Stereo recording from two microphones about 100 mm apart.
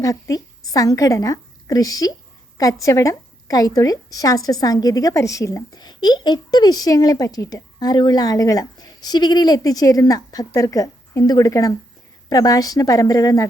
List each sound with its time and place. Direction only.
0.0 s a woman's voice: 35° left (ahead or behind)